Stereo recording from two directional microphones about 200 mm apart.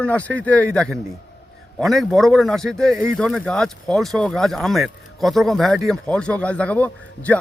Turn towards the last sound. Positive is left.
turn(degrees=5)  # may be behind; listen again after turning